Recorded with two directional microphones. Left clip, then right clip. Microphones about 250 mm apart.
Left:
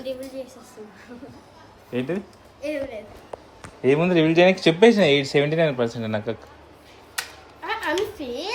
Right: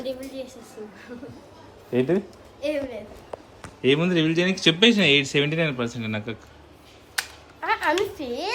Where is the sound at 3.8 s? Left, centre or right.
Centre.